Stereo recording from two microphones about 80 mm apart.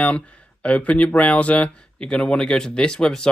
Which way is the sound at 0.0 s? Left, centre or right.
Centre.